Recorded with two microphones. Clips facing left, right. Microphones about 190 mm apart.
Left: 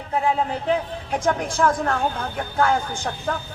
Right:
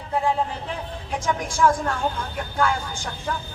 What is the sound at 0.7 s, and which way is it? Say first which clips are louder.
Speech: left 7 dB; 60° left (ahead or behind).